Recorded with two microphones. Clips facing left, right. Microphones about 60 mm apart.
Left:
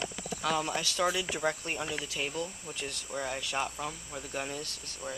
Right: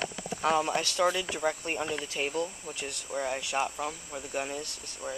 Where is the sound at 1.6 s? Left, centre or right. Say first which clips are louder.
Right 3 dB; right.